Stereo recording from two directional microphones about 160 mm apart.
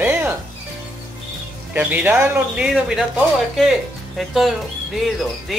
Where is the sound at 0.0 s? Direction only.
10° right (ahead or behind).